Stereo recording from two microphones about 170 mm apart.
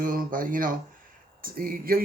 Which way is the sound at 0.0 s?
55° right (ahead or behind).